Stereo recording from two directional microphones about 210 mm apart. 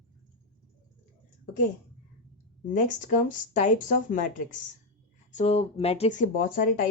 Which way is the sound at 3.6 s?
40° left (ahead or behind).